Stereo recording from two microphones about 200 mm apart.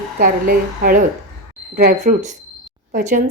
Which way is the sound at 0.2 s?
45° right (ahead or behind).